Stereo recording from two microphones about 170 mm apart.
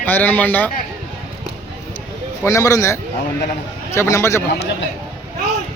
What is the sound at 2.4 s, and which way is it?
A man's voice, 20° left (ahead or behind).